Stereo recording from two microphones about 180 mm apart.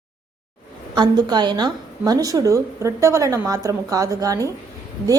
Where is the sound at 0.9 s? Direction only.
25° right (ahead or behind).